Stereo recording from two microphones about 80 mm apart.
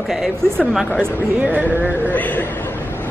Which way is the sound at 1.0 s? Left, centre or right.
Right.